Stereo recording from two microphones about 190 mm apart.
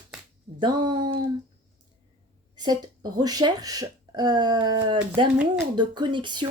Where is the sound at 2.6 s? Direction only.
20° right (ahead or behind).